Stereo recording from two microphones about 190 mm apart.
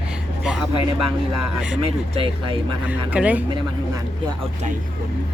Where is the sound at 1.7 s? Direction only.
30° right (ahead or behind).